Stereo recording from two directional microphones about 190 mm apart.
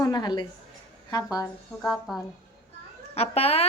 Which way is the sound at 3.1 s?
30° left (ahead or behind).